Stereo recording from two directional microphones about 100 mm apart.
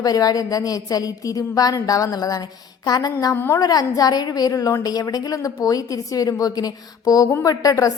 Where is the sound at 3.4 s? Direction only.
20° left (ahead or behind).